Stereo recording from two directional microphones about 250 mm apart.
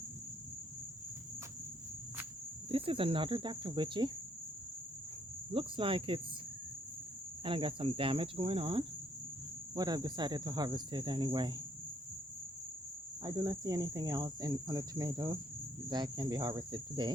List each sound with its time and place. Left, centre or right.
2.6 s cricket: right
5.5 s cricket: right
7.4 s cricket: right
9.7 s speech: centre
13.2 s speech: centre